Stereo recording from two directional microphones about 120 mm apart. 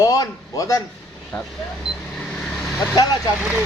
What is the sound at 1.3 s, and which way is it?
Speech, 10° left (ahead or behind).